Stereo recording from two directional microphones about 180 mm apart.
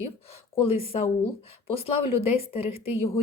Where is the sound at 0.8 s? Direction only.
35° left (ahead or behind).